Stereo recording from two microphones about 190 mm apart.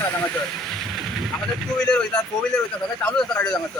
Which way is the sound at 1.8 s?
5° left (ahead or behind).